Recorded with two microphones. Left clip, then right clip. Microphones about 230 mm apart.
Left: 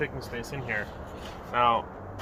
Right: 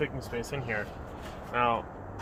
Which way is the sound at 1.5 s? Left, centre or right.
Centre.